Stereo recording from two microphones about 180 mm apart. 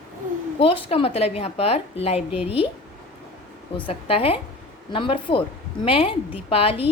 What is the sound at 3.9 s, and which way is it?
A woman's voice, 30° left (ahead or behind).